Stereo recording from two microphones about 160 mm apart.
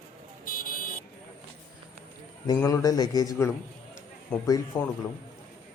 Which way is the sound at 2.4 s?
20° left (ahead or behind).